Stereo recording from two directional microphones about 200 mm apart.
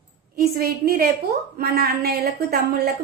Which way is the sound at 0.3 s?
50° right (ahead or behind).